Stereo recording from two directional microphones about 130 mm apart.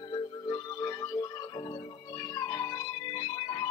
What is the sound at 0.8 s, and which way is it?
Music, 25° left (ahead or behind).